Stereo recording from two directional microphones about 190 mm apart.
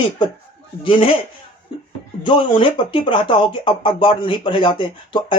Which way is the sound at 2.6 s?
25° left (ahead or behind).